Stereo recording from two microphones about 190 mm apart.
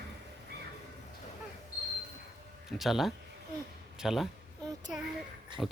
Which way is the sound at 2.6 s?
Centre (ahead or behind).